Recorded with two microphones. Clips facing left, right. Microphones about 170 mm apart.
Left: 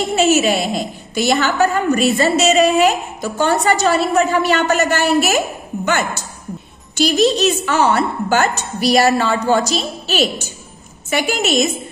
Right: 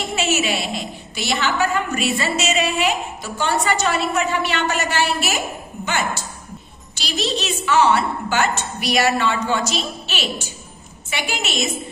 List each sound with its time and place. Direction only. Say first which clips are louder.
0.1 s a woman's voice: left 7 dB; 40° left (ahead or behind)